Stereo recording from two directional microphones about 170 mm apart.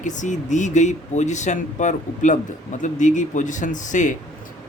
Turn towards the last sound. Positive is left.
turn(degrees=50)  # may be behind; listen again after turning